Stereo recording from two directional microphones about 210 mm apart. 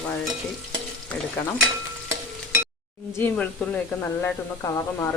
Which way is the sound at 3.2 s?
10° left (ahead or behind).